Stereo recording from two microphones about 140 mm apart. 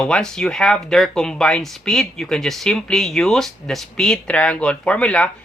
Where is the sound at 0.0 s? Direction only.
5° left (ahead or behind).